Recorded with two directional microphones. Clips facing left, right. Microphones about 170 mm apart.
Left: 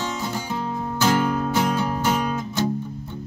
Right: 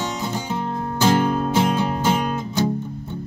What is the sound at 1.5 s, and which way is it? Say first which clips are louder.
Music: right 2 dB; 25° right (ahead or behind).